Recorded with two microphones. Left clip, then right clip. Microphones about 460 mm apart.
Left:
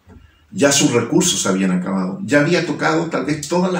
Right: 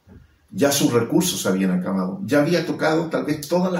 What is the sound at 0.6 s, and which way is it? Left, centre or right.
Speech, right.